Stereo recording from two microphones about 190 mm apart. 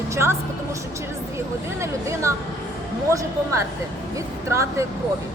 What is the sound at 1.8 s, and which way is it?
Speech, 15° right (ahead or behind).